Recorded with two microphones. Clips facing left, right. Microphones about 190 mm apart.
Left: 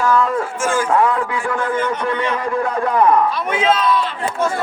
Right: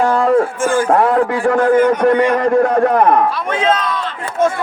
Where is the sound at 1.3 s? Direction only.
55° right (ahead or behind).